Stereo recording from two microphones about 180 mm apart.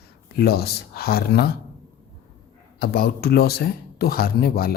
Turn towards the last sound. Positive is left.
turn(degrees=55)  # may be behind; listen again after turning